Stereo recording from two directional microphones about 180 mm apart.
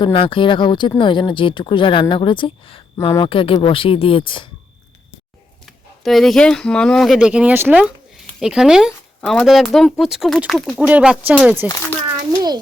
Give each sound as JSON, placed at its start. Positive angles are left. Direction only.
{"t": 0.0, "sound": "speech", "side_deg": 30}
{"t": 5.6, "sound": "speech", "side_deg": 0}